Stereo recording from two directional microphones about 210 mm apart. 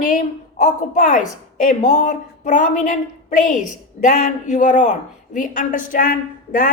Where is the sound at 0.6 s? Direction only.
40° left (ahead or behind).